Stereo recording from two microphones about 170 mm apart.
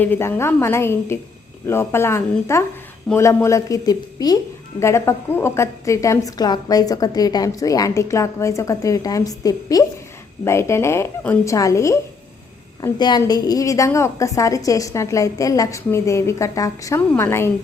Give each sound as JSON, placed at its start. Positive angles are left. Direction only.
{"t": 0.0, "sound": "a woman's voice", "side_deg": 10}